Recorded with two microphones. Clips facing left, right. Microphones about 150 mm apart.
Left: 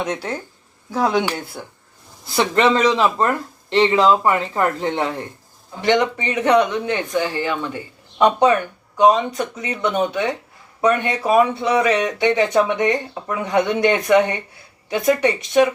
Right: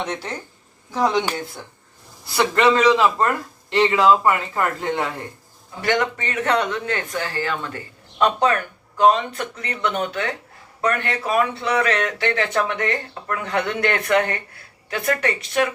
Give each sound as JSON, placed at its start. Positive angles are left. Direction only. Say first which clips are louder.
{"t": 0.0, "sound": "speech", "louder": "left 3 dB", "side_deg": 10}
{"t": 2.3, "sound": "speech", "louder": "left 1 dB", "side_deg": 20}